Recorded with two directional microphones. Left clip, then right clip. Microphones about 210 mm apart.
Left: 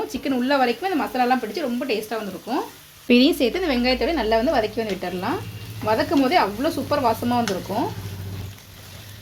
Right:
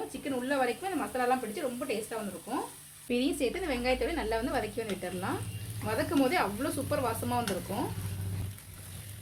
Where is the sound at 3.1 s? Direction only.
45° left (ahead or behind); by 4.8 s 30° left (ahead or behind).